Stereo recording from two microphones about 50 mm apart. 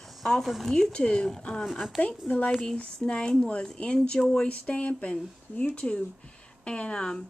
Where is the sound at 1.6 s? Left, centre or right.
Centre.